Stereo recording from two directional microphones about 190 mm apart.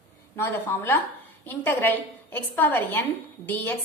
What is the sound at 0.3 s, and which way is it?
A woman's voice, 10° left (ahead or behind).